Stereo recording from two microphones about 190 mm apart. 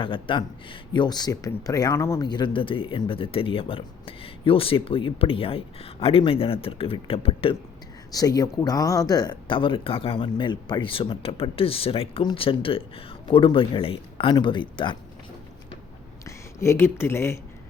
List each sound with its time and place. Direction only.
0.0 s speech: 25° left (ahead or behind)
8.1 s speech: 20° left (ahead or behind)
16.2 s speech: 15° left (ahead or behind)